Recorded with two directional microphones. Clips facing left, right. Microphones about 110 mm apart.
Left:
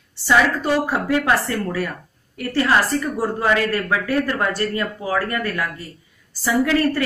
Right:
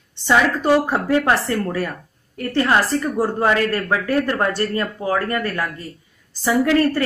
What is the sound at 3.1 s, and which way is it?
Speech, 25° right (ahead or behind).